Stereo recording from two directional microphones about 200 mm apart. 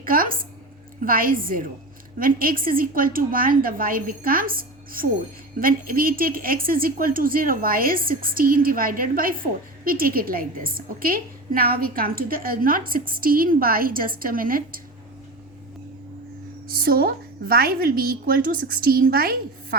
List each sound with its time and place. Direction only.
0.0 s a sound: 45° right (ahead or behind)
1.0 s a woman's voice: 45° right (ahead or behind)
16.6 s a woman's voice: 50° right (ahead or behind)